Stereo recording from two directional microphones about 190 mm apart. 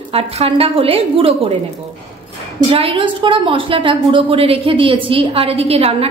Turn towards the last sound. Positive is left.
turn(degrees=-30)  # may be behind; listen again after turning